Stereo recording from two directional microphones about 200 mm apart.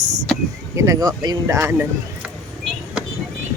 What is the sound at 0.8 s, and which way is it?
Speech, 15° right (ahead or behind).